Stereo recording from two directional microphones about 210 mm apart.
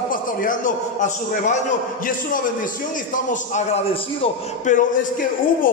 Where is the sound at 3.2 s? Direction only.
30° left (ahead or behind).